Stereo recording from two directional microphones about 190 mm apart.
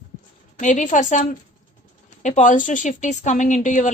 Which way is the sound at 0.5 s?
40° left (ahead or behind).